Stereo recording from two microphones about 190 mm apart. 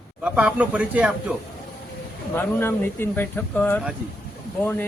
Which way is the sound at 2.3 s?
10° left (ahead or behind).